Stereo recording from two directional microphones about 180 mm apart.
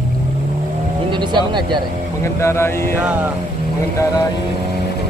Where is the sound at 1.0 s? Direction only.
25° right (ahead or behind).